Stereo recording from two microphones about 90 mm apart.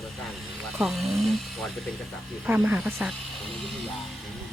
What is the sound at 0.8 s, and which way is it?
Speech, centre (ahead or behind).